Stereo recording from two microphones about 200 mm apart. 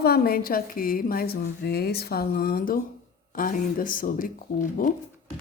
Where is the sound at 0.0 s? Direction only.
50° left (ahead or behind).